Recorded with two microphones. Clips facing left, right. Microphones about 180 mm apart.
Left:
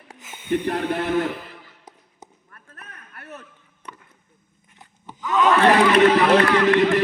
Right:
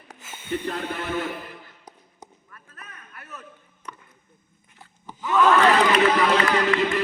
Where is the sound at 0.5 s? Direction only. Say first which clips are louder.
Left 6 dB; 65° left (ahead or behind).